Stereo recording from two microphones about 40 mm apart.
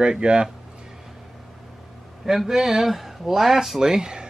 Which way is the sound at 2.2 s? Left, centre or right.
Centre.